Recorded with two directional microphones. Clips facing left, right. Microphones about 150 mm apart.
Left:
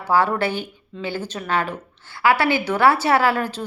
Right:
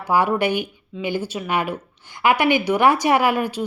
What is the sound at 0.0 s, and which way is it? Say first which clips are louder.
Speech: even; 15° right (ahead or behind).